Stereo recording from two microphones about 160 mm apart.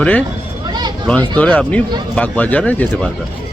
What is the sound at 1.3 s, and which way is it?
Speech, 10° left (ahead or behind).